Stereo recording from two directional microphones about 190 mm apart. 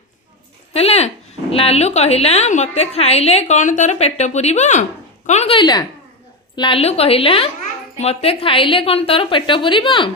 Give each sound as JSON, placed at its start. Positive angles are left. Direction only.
{"t": 0.7, "sound": "a woman's voice", "side_deg": 30}